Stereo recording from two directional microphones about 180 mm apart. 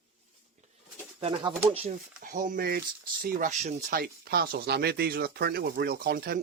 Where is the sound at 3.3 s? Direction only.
45° right (ahead or behind).